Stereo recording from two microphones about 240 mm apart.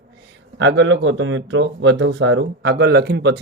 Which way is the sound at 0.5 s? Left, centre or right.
Right.